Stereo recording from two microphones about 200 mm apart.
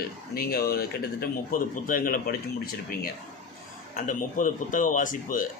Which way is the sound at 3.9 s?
45° left (ahead or behind).